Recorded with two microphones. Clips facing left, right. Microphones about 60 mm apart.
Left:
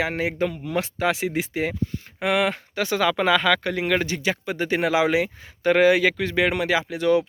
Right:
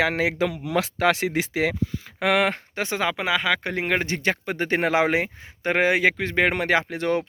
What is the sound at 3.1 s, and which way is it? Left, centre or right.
Speech, centre.